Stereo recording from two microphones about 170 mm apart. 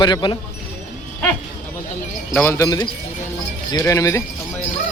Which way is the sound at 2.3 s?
15° left (ahead or behind).